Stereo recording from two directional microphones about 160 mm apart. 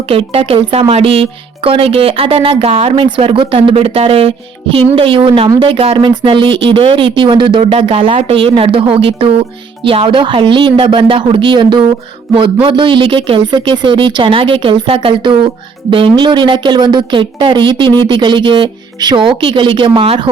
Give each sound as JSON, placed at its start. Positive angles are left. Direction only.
{"t": 0.1, "sound": "speech", "side_deg": -35}